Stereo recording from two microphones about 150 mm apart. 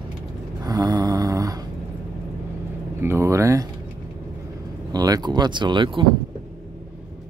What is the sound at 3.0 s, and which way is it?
Speech, 15° right (ahead or behind).